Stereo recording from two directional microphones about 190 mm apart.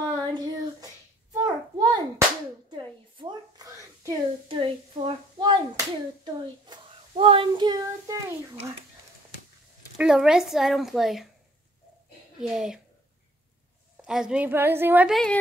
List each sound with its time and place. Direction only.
0.1 s child singing: 20° right (ahead or behind)
1.3 s hands: 20° right (ahead or behind)
2.7 s a sound: 25° right (ahead or behind)
6.2 s child singing: 25° right (ahead or behind)
9.9 s a woman's voice: 5° right (ahead or behind)
12.4 s a woman's voice: centre (ahead or behind)
14.0 s a woman's voice: 5° right (ahead or behind)